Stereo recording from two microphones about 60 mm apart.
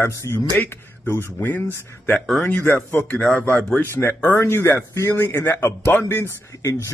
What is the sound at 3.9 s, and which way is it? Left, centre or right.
Speech, left.